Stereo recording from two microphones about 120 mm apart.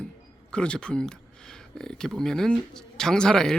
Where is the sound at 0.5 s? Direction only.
10° left (ahead or behind).